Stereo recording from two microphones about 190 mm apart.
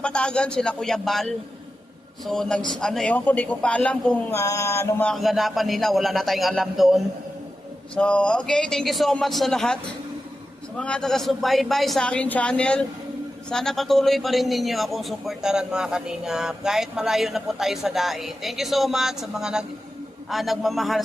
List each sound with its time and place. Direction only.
0.0 s a man's voice: 5° left (ahead or behind)
10.8 s a man's voice: 5° left (ahead or behind)